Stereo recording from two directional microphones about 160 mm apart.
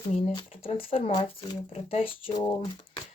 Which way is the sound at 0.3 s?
35° left (ahead or behind).